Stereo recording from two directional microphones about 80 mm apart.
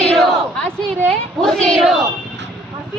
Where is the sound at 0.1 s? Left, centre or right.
Centre.